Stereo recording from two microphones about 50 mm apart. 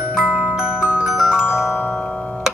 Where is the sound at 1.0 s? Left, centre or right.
Centre.